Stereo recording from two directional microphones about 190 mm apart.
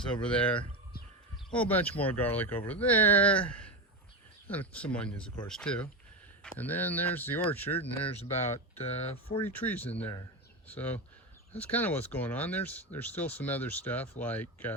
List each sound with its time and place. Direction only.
0.1 s speech: 5° left (ahead or behind)
8.5 s speech: 35° left (ahead or behind)
9.4 s speech: 10° left (ahead or behind)